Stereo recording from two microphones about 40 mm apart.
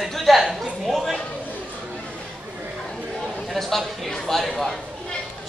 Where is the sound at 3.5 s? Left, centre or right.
Centre.